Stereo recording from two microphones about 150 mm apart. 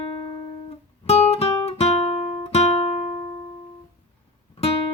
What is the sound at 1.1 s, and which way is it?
Guitar, 45° left (ahead or behind).